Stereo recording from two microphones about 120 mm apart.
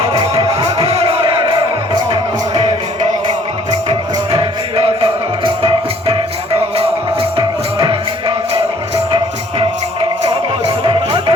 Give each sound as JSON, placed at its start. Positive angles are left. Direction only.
{"t": 0.3, "sound": "music", "side_deg": -60}
{"t": 2.6, "sound": "music", "side_deg": -60}
{"t": 10.8, "sound": "music", "side_deg": -50}